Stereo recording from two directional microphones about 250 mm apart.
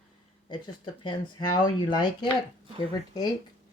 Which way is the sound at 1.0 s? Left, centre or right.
Centre.